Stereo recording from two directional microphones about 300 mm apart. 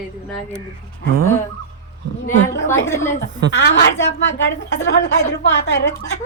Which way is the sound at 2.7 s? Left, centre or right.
Centre.